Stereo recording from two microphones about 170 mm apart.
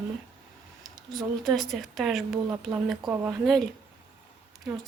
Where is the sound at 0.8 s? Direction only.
25° right (ahead or behind).